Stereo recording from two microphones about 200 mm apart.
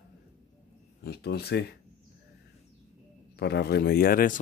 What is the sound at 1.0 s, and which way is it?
Speech, 55° left (ahead or behind).